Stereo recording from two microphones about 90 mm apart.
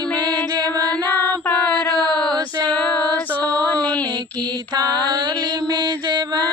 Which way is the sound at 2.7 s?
20° left (ahead or behind).